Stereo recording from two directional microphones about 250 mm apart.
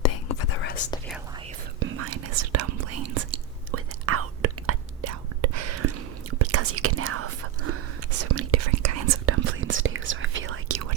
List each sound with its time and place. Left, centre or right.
0.0 s whispering: left
1.8 s whispering: right
3.7 s whispering: right
9.4 s whispering: right